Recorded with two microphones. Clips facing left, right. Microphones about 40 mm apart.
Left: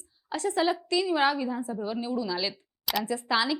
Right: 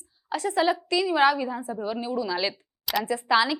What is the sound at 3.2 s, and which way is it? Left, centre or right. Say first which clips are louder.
Speech: right 5 dB; centre.